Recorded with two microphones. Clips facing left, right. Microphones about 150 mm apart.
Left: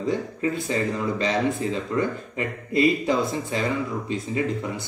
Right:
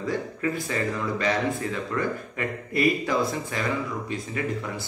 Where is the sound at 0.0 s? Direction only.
25° left (ahead or behind).